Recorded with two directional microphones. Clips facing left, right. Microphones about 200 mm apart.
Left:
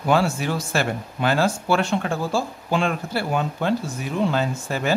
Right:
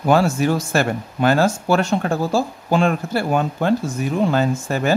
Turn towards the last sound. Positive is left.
turn(degrees=-45)  # may be behind; listen again after turning